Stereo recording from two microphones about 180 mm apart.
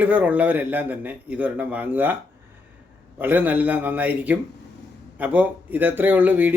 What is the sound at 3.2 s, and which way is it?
Speech, 10° right (ahead or behind).